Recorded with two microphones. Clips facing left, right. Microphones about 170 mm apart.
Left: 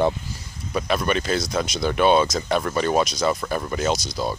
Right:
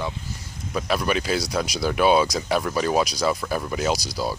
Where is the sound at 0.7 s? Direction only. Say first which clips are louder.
Left 1 dB; centre (ahead or behind).